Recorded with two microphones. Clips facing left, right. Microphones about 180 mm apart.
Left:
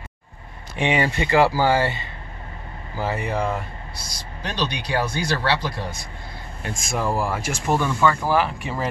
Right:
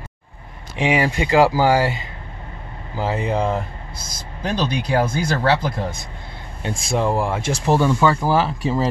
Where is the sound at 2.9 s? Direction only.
20° right (ahead or behind).